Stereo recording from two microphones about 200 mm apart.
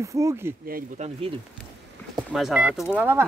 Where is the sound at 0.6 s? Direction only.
45° right (ahead or behind).